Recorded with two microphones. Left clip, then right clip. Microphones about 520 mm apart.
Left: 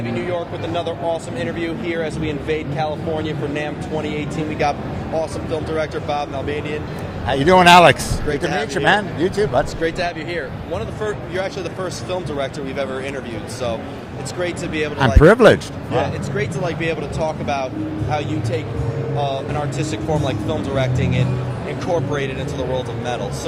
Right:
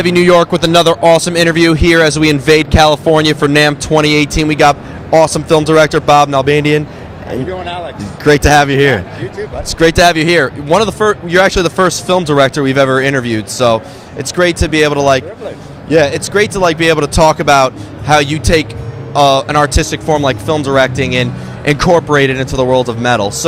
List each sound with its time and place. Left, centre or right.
0.3 s speech: right
5.2 s speech: right
7.4 s speech: left
8.3 s speech: right
9.8 s speech: right